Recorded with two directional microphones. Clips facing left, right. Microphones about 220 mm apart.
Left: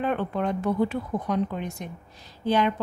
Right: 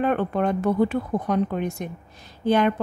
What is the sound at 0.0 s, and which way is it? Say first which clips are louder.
A woman's voice: right 4 dB; 55° right (ahead or behind).